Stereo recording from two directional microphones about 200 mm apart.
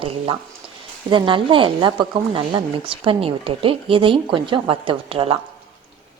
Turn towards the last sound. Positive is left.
turn(degrees=-25)  # may be behind; listen again after turning